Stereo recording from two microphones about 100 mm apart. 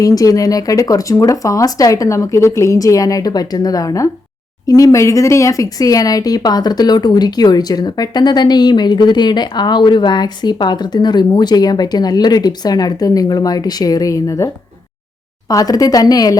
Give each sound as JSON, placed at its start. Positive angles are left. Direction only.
{"t": 0.0, "sound": "speech", "side_deg": 35}